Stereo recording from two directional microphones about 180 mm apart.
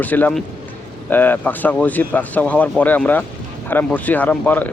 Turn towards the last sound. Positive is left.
turn(degrees=10)  # may be behind; listen again after turning